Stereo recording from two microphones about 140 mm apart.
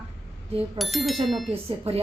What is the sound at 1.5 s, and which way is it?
Speech, 45° right (ahead or behind).